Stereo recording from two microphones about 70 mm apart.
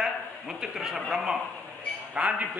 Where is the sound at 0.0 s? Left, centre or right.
Centre.